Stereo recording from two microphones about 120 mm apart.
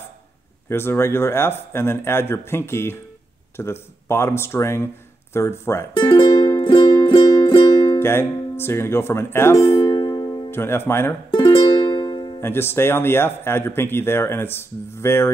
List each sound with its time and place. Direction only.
0.7 s speech: 20° left (ahead or behind)
5.9 s music: 45° left (ahead or behind)
8.0 s speech: 20° left (ahead or behind)
9.8 s music: 45° left (ahead or behind)
10.5 s speech: 20° left (ahead or behind)
11.2 s music: 35° left (ahead or behind)
12.4 s speech: 20° left (ahead or behind)